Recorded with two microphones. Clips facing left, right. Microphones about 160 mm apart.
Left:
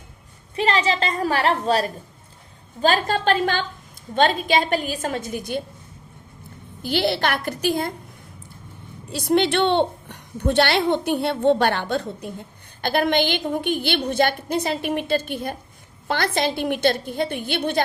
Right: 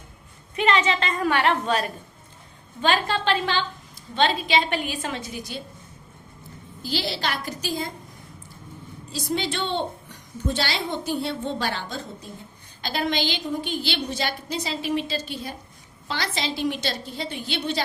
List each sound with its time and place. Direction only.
0.5 s a woman's voice: 35° left (ahead or behind); by 5.6 s 55° left (ahead or behind)
6.8 s a woman's voice: 60° left (ahead or behind)
9.1 s a woman's voice: 65° left (ahead or behind)